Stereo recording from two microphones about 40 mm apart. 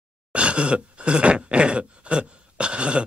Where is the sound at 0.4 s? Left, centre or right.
Right.